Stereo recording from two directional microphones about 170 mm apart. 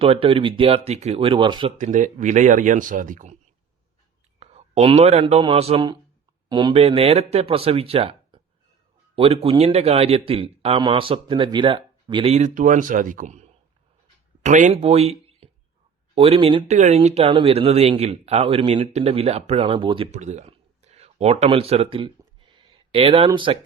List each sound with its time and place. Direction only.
0.0 s speech: 35° right (ahead or behind)
1.8 s speech: 45° right (ahead or behind)
4.4 s a sound: 40° right (ahead or behind)
5.2 s speech: 30° right (ahead or behind)
6.8 s speech: 35° right (ahead or behind)
12.4 s speech: 50° right (ahead or behind); by 16.7 s 30° right (ahead or behind)
16.7 s speech: 40° right (ahead or behind)
20.1 s a sound: 45° right (ahead or behind)